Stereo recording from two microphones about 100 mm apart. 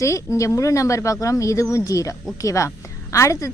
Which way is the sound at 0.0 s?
30° left (ahead or behind).